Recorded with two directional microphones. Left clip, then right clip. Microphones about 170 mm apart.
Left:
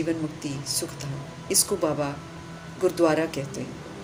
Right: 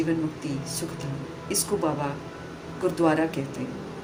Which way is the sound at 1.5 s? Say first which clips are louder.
Left 4 dB; 45° left (ahead or behind).